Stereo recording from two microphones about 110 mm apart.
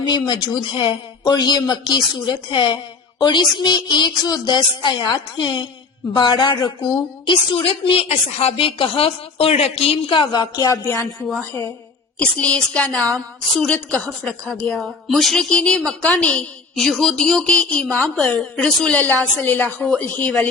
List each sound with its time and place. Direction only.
0.1 s a woman's voice: 40° left (ahead or behind); by 10.2 s 65° left (ahead or behind)
10.2 s speech: 45° left (ahead or behind)
10.8 s a woman's voice: 20° left (ahead or behind)
12.2 s a woman's voice: 10° left (ahead or behind)